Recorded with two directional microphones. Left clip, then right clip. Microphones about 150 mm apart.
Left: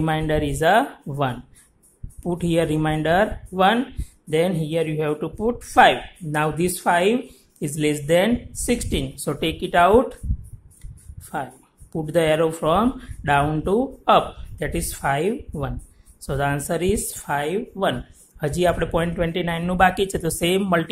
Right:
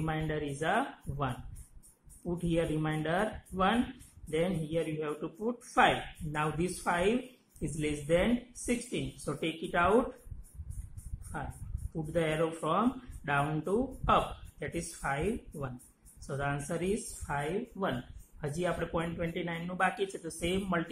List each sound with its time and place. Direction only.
0.0 s speech: 55° left (ahead or behind)
11.9 s speech: 55° left (ahead or behind)